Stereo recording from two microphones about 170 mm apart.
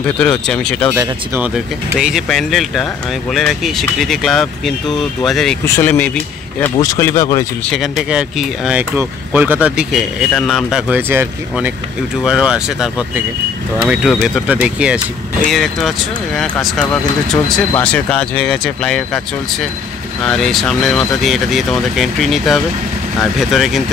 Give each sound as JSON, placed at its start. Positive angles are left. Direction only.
{"t": 0.2, "sound": "speech", "side_deg": 5}
{"t": 0.9, "sound": "speech", "side_deg": -10}
{"t": 7.7, "sound": "speech", "side_deg": 0}
{"t": 10.9, "sound": "speech", "side_deg": -10}
{"t": 20.2, "sound": "speech", "side_deg": 0}